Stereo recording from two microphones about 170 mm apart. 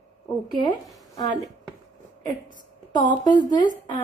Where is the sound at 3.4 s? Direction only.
50° left (ahead or behind).